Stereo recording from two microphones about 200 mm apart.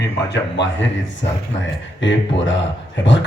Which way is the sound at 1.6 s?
65° left (ahead or behind).